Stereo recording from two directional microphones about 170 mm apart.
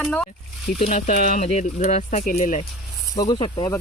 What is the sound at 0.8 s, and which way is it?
Speech, 45° left (ahead or behind).